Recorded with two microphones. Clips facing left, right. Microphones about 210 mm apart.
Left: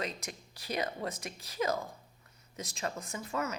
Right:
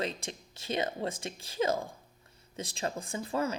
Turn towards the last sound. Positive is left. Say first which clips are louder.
# right 4 dB
turn(degrees=-30)  # may be behind; listen again after turning